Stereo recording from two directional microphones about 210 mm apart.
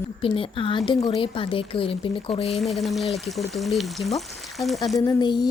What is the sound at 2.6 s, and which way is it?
Frying, centre (ahead or behind).